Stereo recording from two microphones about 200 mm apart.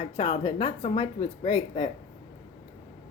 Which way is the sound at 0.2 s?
30° left (ahead or behind).